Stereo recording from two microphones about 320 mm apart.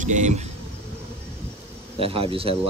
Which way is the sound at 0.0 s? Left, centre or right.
Right.